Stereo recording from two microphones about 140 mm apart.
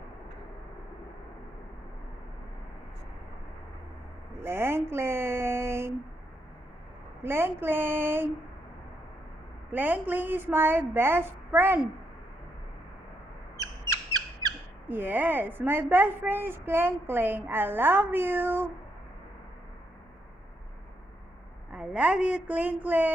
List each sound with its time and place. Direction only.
4.4 s a sound: 15° right (ahead or behind)
7.2 s a woman's voice: 15° right (ahead or behind)
9.7 s a woman's voice: 10° right (ahead or behind)
14.8 s a woman's voice: 15° right (ahead or behind)
21.7 s a woman's voice: 5° right (ahead or behind)